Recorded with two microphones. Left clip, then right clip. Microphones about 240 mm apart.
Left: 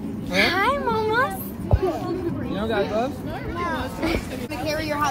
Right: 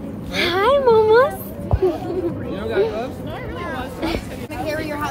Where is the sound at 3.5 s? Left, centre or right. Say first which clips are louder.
Left 3 dB; centre.